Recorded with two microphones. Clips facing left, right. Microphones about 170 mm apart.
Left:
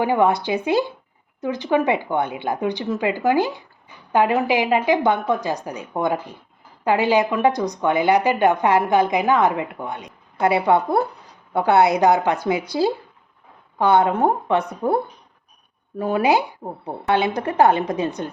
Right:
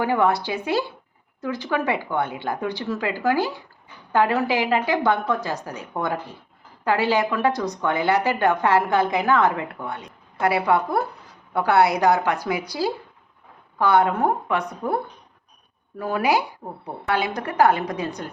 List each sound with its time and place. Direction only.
0.0 s a woman's voice: 20° left (ahead or behind)
16.0 s a woman's voice: 25° left (ahead or behind)